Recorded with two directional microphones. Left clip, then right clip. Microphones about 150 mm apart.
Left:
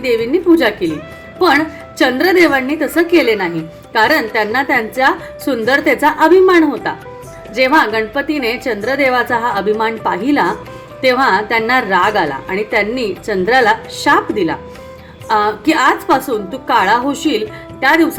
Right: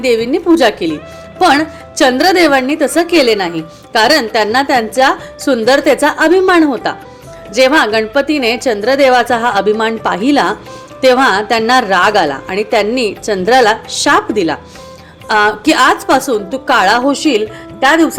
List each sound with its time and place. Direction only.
0.2 s a woman's voice: 45° right (ahead or behind)
10.0 s a woman's voice: 50° right (ahead or behind)
15.7 s a woman's voice: 40° right (ahead or behind)
17.7 s speech: 30° right (ahead or behind)